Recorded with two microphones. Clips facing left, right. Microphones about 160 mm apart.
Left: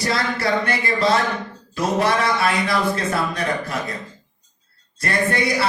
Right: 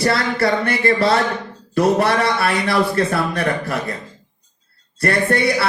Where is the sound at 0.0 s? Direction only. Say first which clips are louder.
Right 4 dB; 60° right (ahead or behind).